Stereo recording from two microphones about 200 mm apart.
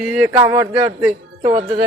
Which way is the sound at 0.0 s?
5° right (ahead or behind).